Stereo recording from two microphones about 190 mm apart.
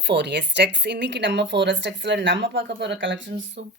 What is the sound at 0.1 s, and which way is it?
Speech, 65° right (ahead or behind).